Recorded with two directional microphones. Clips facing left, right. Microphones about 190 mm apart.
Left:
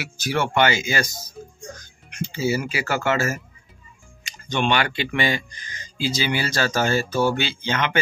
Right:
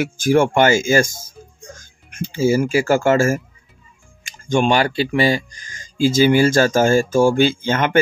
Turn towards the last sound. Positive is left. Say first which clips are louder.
# right 6 dB
turn(degrees=-50)  # may be behind; listen again after turning